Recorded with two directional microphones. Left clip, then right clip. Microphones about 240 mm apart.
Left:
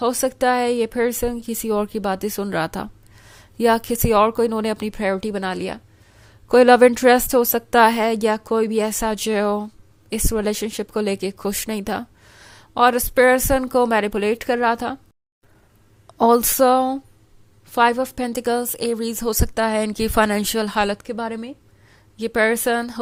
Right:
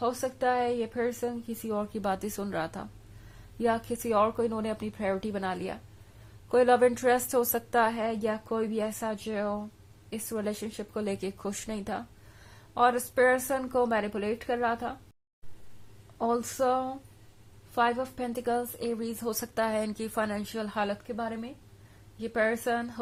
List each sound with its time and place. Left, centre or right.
0.0 s speech: left
16.1 s speech: left